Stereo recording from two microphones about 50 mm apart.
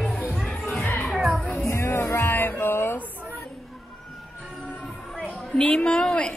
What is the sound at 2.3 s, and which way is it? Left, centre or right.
Music, left.